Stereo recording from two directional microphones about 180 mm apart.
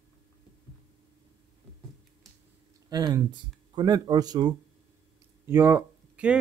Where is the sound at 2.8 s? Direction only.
20° right (ahead or behind).